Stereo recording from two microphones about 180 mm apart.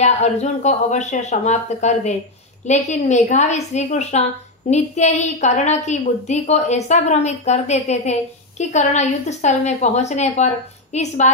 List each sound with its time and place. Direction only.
0.0 s a woman's voice: 40° left (ahead or behind)